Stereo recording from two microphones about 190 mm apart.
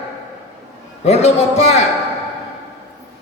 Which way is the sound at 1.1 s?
35° left (ahead or behind).